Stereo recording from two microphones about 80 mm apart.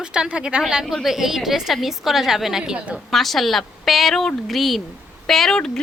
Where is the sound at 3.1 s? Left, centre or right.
Centre.